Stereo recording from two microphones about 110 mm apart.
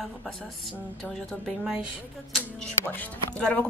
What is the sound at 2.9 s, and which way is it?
Speech, 10° left (ahead or behind).